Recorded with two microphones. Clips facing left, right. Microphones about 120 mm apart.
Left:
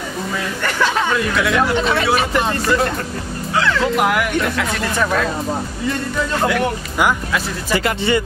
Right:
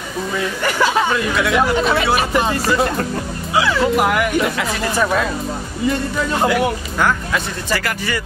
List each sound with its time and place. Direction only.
0.6 s speech: 10° right (ahead or behind)
6.4 s speech: 5° right (ahead or behind)
7.7 s speech: 25° left (ahead or behind)